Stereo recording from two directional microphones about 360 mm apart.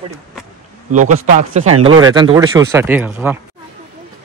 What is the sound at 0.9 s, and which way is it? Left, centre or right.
A man's voice, right.